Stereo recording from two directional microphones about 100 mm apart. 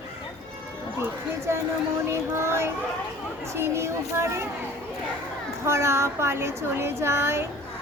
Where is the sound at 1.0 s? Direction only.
25° right (ahead or behind).